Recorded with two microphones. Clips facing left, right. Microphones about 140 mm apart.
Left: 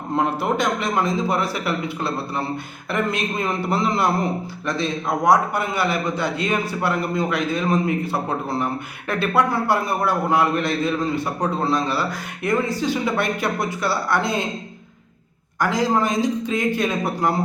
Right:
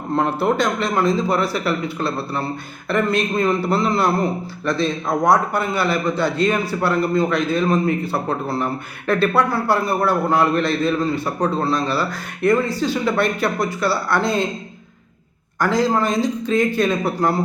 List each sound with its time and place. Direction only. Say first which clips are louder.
0.2 s a man's voice: right 2 dB; 15° left (ahead or behind)
15.7 s a man's voice: right 2 dB; 15° left (ahead or behind)